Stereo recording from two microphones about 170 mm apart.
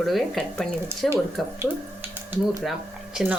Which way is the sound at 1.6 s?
10° right (ahead or behind).